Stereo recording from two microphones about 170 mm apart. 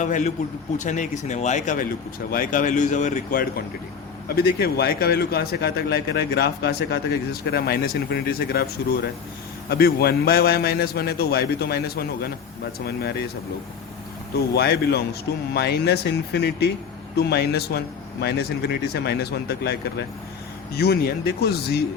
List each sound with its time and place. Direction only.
0.0 s speech: 45° left (ahead or behind)
4.4 s speech: 65° left (ahead or behind)
14.3 s speech: 70° left (ahead or behind)
20.7 s speech: 70° left (ahead or behind)